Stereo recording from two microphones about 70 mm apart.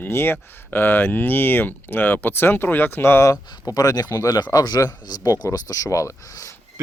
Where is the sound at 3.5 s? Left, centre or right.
Left.